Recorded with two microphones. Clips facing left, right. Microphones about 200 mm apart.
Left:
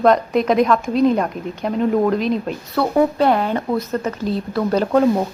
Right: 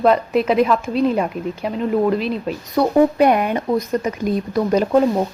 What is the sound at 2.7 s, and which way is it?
Speech, 15° right (ahead or behind).